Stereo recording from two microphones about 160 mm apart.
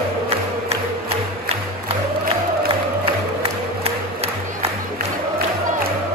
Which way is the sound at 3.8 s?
40° right (ahead or behind).